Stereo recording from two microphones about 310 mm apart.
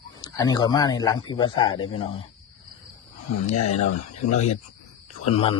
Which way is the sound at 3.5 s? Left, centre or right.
Left.